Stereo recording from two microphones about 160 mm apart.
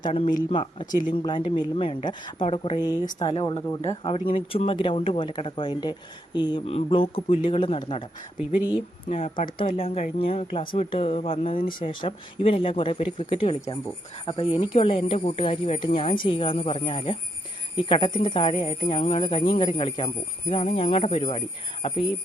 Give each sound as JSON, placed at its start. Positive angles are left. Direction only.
{"t": 0.0, "sound": "speech", "side_deg": 35}
{"t": 8.4, "sound": "speech", "side_deg": -10}
{"t": 9.0, "sound": "speech", "side_deg": 35}